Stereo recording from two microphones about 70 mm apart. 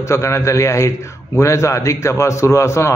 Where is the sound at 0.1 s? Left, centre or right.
Left.